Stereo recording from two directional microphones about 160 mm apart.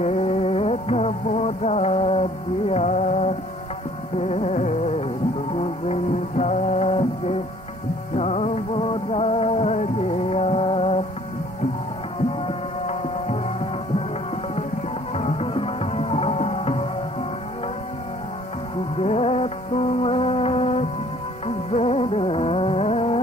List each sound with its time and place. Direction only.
0.0 s music: 40° left (ahead or behind)
12.3 s music: 40° left (ahead or behind)
15.1 s music: 40° left (ahead or behind)
18.9 s music: 40° left (ahead or behind)